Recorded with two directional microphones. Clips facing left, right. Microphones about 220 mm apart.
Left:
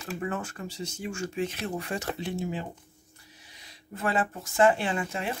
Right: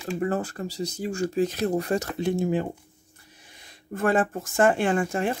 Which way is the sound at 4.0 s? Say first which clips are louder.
Right 6 dB; 50° right (ahead or behind).